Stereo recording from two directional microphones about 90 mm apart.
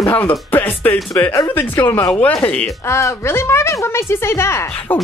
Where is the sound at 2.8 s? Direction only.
30° left (ahead or behind).